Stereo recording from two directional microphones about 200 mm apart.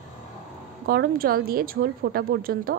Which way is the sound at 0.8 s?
50° right (ahead or behind).